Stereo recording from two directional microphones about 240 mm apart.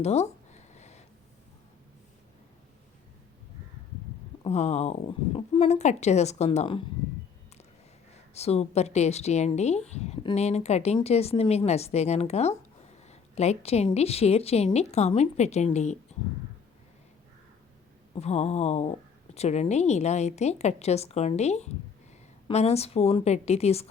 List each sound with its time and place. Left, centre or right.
0.0 s a sound: left
4.4 s speech: left
8.3 s speech: left
18.1 s speech: left